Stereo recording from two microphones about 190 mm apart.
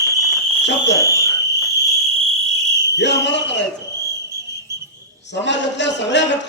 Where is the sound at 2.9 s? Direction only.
65° left (ahead or behind).